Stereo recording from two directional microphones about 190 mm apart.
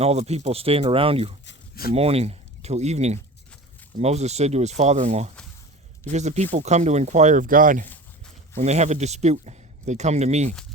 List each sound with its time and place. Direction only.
0.0 s speech: 35° right (ahead or behind)
1.5 s a sound: 55° left (ahead or behind)
1.9 s speech: 30° right (ahead or behind)